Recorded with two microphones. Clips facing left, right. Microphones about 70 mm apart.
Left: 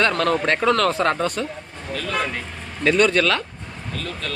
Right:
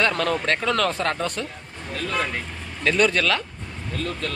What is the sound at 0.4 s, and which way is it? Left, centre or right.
Speech, centre.